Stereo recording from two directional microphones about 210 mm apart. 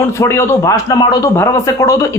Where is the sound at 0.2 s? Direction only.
15° left (ahead or behind).